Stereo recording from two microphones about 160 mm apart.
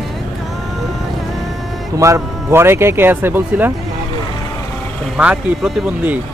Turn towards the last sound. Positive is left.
turn(degrees=-10)  # may be behind; listen again after turning